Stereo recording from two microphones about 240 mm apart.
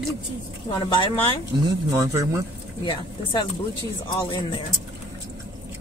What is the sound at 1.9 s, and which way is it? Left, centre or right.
Speech, centre.